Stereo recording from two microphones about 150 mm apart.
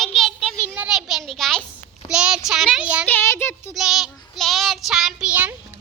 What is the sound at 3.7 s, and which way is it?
Child singing, centre (ahead or behind).